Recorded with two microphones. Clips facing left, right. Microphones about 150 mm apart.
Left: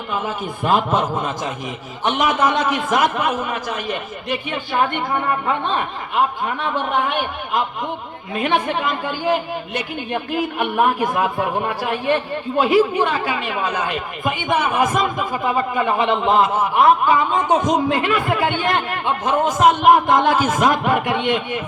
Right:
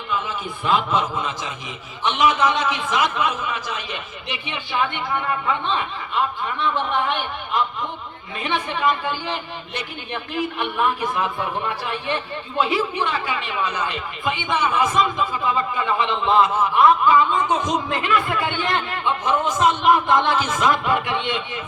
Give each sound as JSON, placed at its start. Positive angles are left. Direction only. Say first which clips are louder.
{"t": 0.1, "sound": "speech", "louder": "left 2 dB", "side_deg": 45}